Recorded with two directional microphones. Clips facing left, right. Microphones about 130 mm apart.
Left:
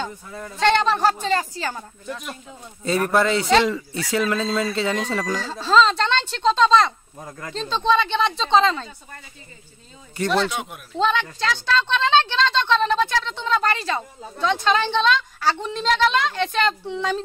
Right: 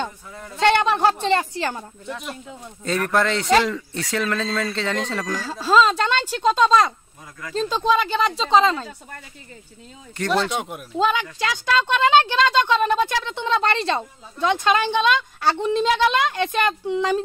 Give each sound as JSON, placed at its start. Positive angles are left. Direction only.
{"t": 0.0, "sound": "a man's voice", "side_deg": -15}
{"t": 2.8, "sound": "speech", "side_deg": 5}
{"t": 5.4, "sound": "a woman's voice", "side_deg": -10}
{"t": 7.2, "sound": "speech", "side_deg": 40}
{"t": 7.6, "sound": "speech", "side_deg": -10}
{"t": 10.1, "sound": "speech", "side_deg": 5}
{"t": 11.0, "sound": "a woman's voice", "side_deg": -10}